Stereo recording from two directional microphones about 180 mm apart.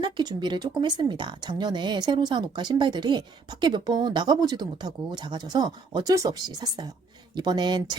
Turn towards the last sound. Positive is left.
turn(degrees=-25)  # may be behind; listen again after turning